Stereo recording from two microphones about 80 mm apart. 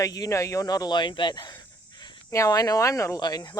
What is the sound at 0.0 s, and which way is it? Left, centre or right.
Speech, left.